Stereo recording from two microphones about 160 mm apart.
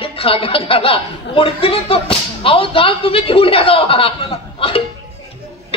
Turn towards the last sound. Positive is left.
turn(degrees=35)  # may be behind; listen again after turning